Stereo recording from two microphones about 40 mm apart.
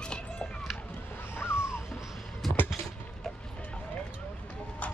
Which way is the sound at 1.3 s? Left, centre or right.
Left.